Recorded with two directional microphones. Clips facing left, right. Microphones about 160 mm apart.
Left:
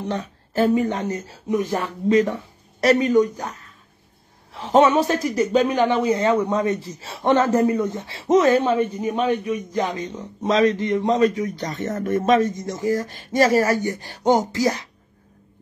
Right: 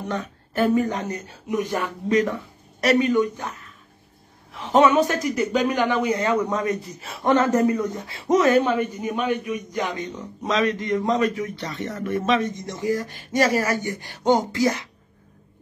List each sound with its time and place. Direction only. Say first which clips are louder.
0.0 s a man's voice: left 2 dB; 20° left (ahead or behind)